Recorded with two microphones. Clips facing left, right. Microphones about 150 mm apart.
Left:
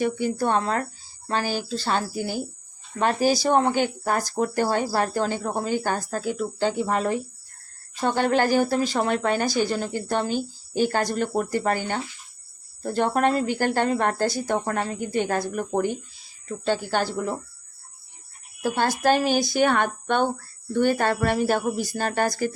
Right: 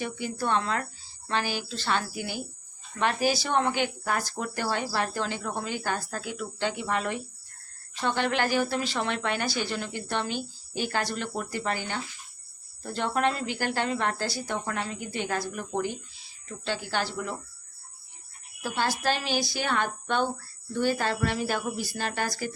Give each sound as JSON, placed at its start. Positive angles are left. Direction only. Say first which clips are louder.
{"t": 0.0, "sound": "speech", "louder": "left 7 dB", "side_deg": 45}
{"t": 18.6, "sound": "speech", "louder": "left 6 dB", "side_deg": 50}